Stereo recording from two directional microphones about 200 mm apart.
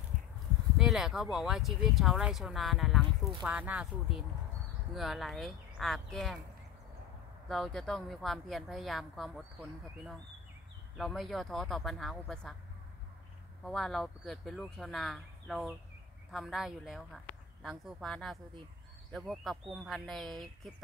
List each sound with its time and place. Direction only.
0.7 s speech: centre (ahead or behind)
7.4 s speech: centre (ahead or behind)
11.0 s speech: centre (ahead or behind)
13.7 s speech: centre (ahead or behind)